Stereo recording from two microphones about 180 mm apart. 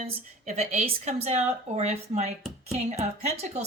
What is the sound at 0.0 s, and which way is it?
Speech, 40° right (ahead or behind).